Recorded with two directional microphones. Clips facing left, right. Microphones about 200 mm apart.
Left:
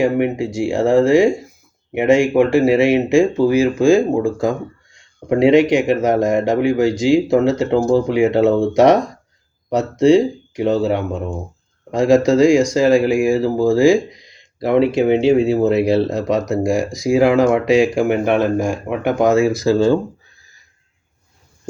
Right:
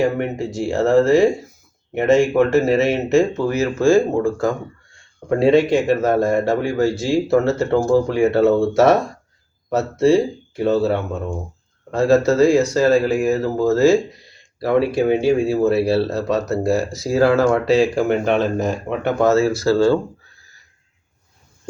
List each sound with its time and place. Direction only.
0.0 s speech: 10° left (ahead or behind)